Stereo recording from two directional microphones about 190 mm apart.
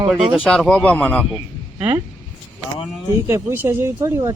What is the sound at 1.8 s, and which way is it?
Speech, 15° right (ahead or behind).